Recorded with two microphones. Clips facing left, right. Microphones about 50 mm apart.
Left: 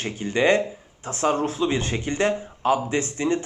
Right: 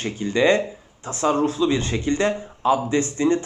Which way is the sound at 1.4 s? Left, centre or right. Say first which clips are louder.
Right 3 dB; left.